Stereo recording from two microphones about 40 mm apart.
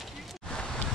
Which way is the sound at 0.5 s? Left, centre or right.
Centre.